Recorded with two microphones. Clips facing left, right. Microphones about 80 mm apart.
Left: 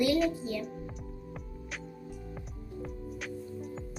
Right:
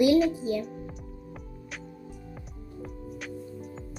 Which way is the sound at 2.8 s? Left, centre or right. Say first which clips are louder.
Right 1 dB; centre.